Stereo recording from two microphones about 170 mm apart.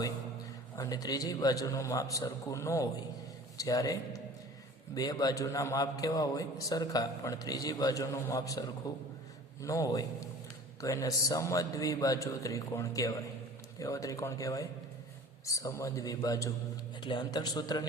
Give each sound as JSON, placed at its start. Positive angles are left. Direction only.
{"t": 0.8, "sound": "a man's voice", "side_deg": 20}